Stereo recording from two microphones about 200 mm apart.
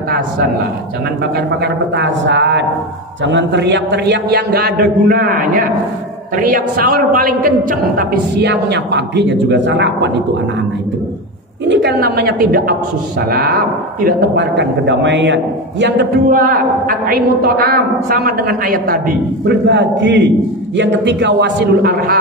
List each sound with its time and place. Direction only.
1.3 s a man's voice: 60° right (ahead or behind)
11.6 s a woman's voice: 60° right (ahead or behind)
16.3 s a woman's voice: 45° right (ahead or behind)